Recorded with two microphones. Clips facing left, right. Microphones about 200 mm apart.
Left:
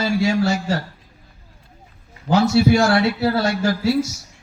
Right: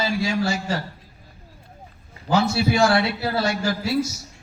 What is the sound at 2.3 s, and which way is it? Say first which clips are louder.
A man's voice: left 5 dB; 50° left (ahead or behind).